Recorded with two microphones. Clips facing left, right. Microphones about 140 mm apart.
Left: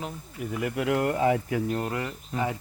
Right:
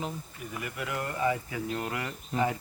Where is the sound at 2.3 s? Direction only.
Centre (ahead or behind).